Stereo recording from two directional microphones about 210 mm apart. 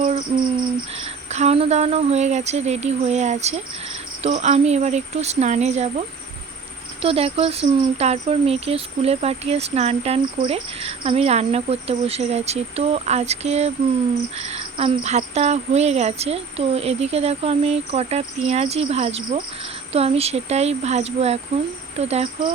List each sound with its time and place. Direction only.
0.9 s speech: 30° right (ahead or behind)
7.0 s speech: 25° right (ahead or behind)